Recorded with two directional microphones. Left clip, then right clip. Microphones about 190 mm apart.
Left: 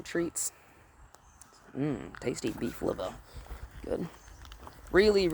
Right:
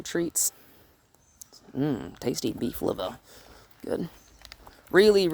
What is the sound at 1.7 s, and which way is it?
Speech, 55° right (ahead or behind).